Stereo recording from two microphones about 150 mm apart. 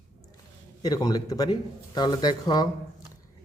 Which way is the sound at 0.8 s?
25° left (ahead or behind).